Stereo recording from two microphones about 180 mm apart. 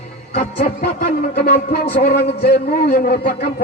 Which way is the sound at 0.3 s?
55° left (ahead or behind).